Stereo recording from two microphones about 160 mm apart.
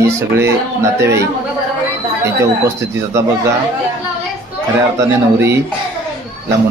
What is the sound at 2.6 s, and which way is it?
Speech, 20° right (ahead or behind).